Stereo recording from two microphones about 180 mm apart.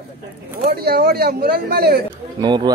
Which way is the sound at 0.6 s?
60° right (ahead or behind).